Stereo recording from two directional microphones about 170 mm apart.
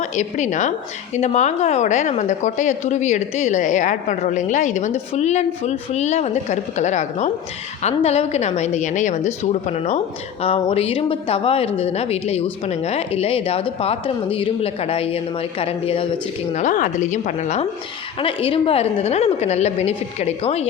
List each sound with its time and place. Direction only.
0.0 s a woman's voice: 45° left (ahead or behind)
16.5 s a woman's voice: 45° left (ahead or behind)